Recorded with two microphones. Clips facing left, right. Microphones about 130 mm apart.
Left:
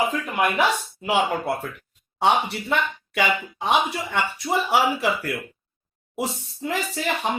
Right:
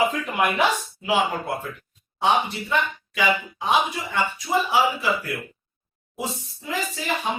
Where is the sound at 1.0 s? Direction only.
65° left (ahead or behind).